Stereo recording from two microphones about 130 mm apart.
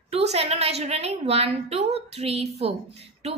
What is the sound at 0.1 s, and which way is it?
A woman's voice, 50° right (ahead or behind).